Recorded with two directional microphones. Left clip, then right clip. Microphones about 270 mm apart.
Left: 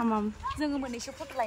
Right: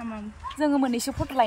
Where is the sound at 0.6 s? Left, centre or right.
Right.